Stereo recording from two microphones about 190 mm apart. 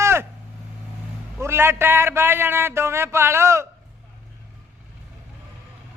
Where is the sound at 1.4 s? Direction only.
15° right (ahead or behind).